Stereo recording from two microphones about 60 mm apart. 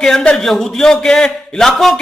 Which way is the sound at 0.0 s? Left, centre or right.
Centre.